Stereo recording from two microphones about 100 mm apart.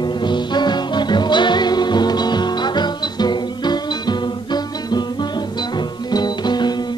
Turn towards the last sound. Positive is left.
turn(degrees=45)  # may be behind; listen again after turning